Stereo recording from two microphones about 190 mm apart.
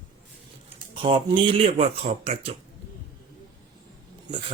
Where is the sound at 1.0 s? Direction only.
25° right (ahead or behind).